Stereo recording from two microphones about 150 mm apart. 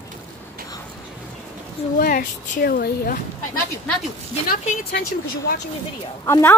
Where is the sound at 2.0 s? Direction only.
70° left (ahead or behind); by 3.2 s 90° left.